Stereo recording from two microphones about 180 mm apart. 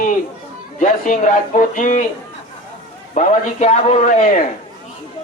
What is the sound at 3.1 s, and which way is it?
Speech, 40° left (ahead or behind).